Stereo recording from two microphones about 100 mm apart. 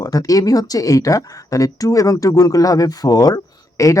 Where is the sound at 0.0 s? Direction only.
35° left (ahead or behind).